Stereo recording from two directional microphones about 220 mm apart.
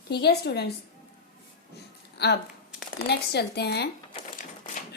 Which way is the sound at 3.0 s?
50° left (ahead or behind).